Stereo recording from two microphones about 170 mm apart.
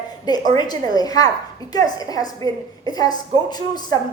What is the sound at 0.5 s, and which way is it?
A woman's voice, 25° left (ahead or behind).